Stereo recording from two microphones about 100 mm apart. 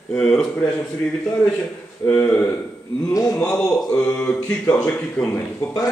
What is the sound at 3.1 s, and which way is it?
Speech, 35° left (ahead or behind).